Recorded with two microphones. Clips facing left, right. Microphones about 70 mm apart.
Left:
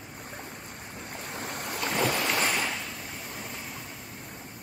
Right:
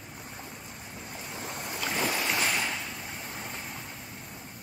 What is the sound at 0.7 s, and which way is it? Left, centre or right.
Waves, left.